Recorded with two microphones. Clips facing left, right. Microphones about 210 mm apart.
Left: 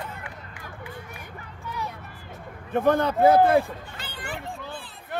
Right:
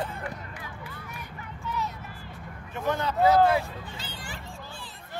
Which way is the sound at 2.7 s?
55° left (ahead or behind).